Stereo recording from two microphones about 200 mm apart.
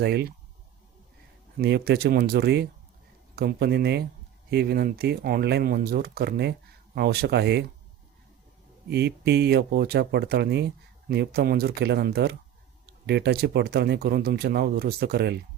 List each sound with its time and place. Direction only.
0.0 s speech: 55° right (ahead or behind)
1.5 s speech: 55° right (ahead or behind)
8.9 s speech: 55° right (ahead or behind)